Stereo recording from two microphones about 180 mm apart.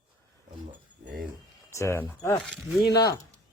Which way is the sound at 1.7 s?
15° left (ahead or behind).